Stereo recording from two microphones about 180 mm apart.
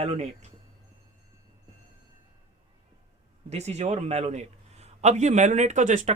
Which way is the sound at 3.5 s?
40° right (ahead or behind).